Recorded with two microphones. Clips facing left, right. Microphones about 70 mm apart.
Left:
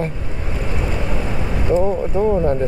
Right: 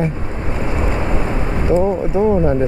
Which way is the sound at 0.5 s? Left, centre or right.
Right.